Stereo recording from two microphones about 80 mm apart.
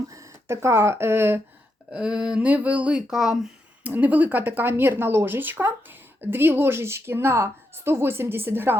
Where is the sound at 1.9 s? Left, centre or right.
Centre.